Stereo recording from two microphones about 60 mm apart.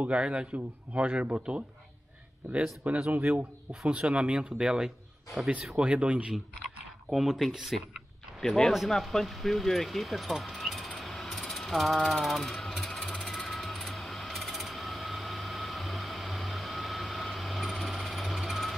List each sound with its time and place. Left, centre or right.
0.0 s a man's voice: centre; by 3.9 s right
3.9 s a man's voice: centre
5.8 s a man's voice: right
7.1 s speech: centre
8.4 s speech: centre
11.0 s jackhammer: centre
13.3 s a sound: centre